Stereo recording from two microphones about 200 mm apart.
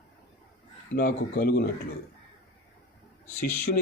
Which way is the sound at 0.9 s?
50° left (ahead or behind).